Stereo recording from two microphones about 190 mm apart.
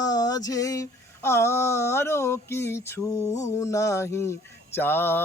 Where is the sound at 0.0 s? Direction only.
20° left (ahead or behind).